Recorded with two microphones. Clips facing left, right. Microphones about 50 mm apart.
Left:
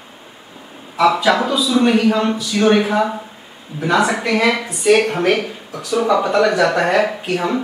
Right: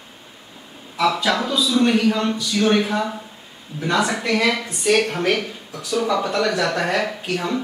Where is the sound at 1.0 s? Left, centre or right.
Centre.